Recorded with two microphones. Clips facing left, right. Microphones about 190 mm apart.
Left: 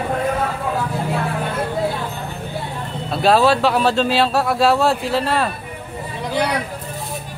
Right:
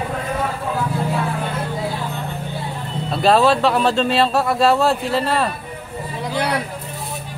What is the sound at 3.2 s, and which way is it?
Speech, centre (ahead or behind).